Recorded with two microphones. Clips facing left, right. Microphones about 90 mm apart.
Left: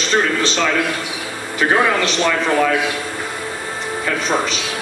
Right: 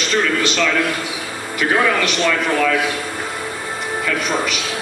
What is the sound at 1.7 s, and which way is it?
A man's voice, 30° left (ahead or behind).